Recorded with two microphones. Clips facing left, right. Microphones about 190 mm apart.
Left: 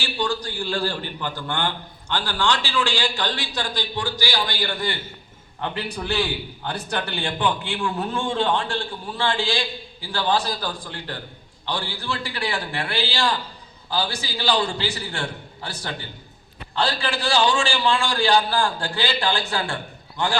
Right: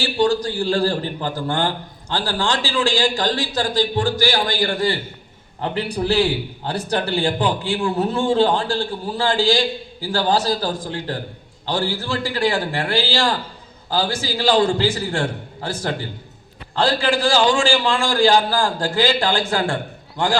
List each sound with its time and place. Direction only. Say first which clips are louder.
0.0 s a man's voice: right 8 dB; 35° right (ahead or behind)